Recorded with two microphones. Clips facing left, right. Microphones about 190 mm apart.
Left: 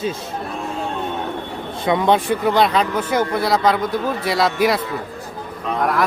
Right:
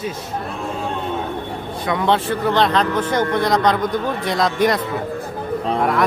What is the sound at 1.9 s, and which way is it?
Speech, 15° left (ahead or behind).